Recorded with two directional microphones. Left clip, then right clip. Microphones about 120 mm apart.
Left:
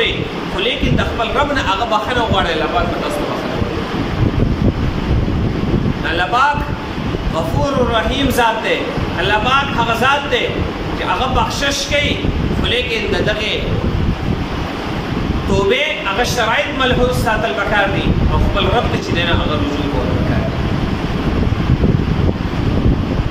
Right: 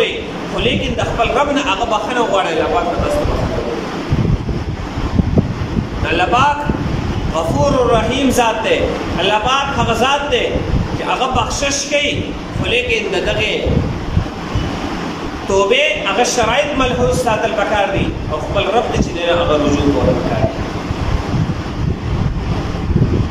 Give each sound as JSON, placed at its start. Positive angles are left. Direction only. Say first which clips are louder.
{"t": 0.7, "sound": "a man's voice", "louder": "right 1 dB", "side_deg": -15}
{"t": 6.1, "sound": "a man's voice", "louder": "right 1 dB", "side_deg": -15}
{"t": 7.9, "sound": "a man's voice", "louder": "right 2 dB", "side_deg": -15}
{"t": 11.1, "sound": "a man's voice", "louder": "even", "side_deg": -15}
{"t": 15.5, "sound": "a man's voice", "louder": "right 3 dB", "side_deg": -15}